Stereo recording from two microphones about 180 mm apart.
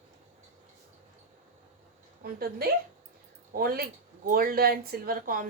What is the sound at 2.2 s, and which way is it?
Speech, 55° right (ahead or behind).